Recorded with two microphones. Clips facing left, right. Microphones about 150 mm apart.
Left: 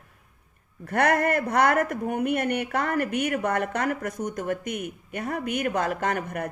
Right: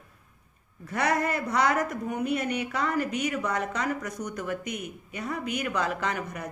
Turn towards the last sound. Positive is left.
turn(degrees=55)  # may be behind; listen again after turning